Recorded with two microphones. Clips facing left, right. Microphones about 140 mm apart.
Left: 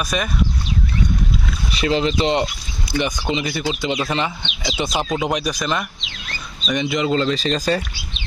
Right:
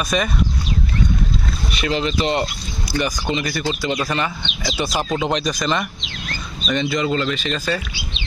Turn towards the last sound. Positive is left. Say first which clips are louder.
# left 3 dB
turn(degrees=35)  # may be behind; listen again after turning